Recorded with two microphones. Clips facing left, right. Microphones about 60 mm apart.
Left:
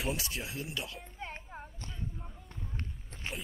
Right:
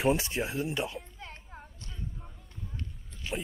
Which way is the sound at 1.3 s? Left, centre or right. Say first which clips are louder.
Left 3 dB; centre.